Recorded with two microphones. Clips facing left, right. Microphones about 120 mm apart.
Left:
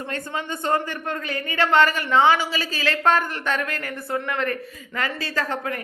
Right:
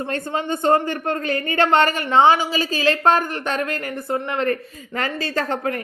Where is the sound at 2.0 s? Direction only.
25° right (ahead or behind).